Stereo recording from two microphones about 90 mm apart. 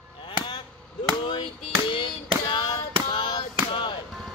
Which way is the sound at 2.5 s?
60° left (ahead or behind).